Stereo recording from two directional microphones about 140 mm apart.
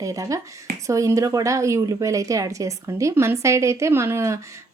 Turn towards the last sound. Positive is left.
turn(degrees=-20)  # may be behind; listen again after turning